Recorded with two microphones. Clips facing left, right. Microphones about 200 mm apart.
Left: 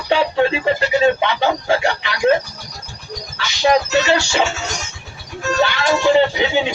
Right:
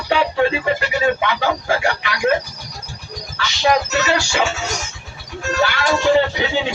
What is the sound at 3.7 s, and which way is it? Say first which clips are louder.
Speech: left 3 dB; 25° left (ahead or behind).